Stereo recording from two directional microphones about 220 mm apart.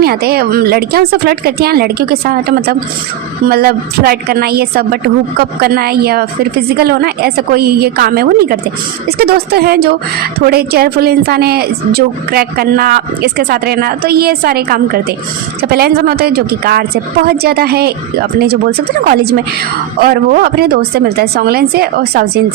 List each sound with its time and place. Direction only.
0.0 s a woman's voice: 45° right (ahead or behind)
19.0 s a woman's voice: 45° right (ahead or behind)